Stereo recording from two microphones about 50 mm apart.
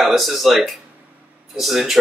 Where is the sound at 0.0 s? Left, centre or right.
Centre.